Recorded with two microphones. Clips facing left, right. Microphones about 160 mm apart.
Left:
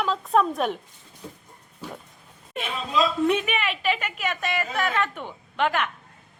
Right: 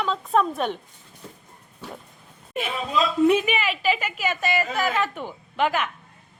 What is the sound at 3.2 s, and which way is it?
A woman's voice, centre (ahead or behind).